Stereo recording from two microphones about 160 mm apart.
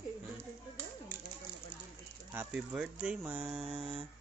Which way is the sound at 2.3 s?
10° right (ahead or behind).